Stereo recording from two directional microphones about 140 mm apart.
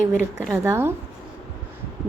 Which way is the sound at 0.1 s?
20° right (ahead or behind).